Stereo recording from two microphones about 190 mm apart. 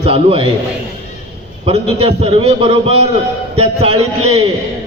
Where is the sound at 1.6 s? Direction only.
30° right (ahead or behind).